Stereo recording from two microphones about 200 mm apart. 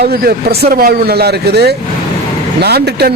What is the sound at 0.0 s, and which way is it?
A man's voice, 50° right (ahead or behind).